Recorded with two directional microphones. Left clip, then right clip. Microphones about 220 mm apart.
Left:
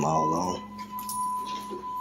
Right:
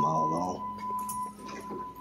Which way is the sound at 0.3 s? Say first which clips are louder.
Left 3 dB; 20° left (ahead or behind).